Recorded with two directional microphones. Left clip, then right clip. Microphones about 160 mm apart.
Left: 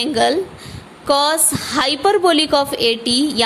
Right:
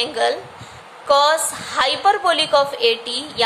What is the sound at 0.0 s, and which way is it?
A woman's voice, 45° left (ahead or behind).